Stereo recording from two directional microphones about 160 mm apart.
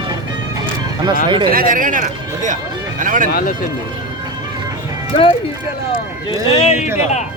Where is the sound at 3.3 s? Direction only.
70° left (ahead or behind).